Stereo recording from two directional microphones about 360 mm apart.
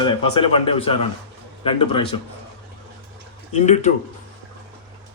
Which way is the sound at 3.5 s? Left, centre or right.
Centre.